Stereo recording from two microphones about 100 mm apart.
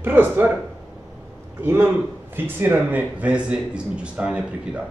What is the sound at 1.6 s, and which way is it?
A man's voice, 25° right (ahead or behind).